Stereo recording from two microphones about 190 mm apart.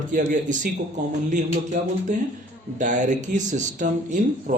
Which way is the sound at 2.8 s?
40° right (ahead or behind).